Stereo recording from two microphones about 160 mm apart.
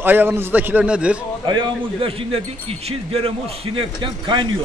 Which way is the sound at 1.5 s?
30° right (ahead or behind).